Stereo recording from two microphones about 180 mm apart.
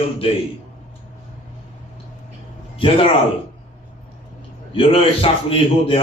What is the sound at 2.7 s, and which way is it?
Speech, 30° left (ahead or behind).